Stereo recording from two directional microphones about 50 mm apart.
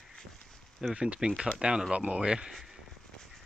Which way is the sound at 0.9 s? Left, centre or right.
Centre.